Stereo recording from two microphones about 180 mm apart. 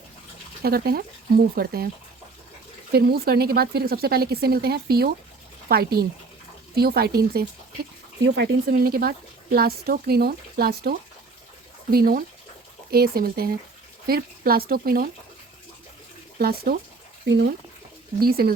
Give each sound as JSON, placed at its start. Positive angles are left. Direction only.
{"t": 0.6, "sound": "speech", "side_deg": -60}
{"t": 2.9, "sound": "speech", "side_deg": -60}
{"t": 8.2, "sound": "speech", "side_deg": -80}
{"t": 8.7, "sound": "speech", "side_deg": -55}
{"t": 16.4, "sound": "speech", "side_deg": -55}
{"t": 17.2, "sound": "speech", "side_deg": -75}
{"t": 18.2, "sound": "speech", "side_deg": -55}